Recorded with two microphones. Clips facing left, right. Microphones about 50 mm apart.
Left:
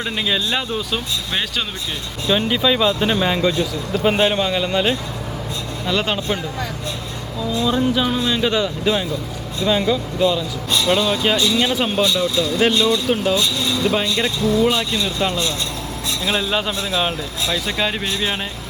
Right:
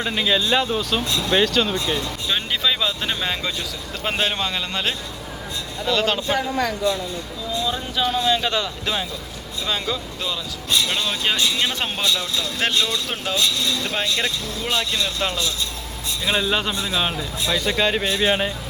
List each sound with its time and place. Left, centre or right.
0.0 s speech: centre
7.6 s speech: centre